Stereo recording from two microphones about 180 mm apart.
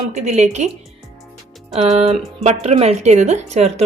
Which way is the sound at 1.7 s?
35° right (ahead or behind).